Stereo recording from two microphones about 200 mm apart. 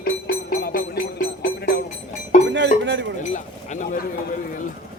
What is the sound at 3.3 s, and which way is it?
Speech, 40° left (ahead or behind).